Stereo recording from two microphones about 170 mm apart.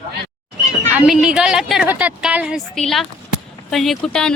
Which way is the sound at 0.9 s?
5° right (ahead or behind).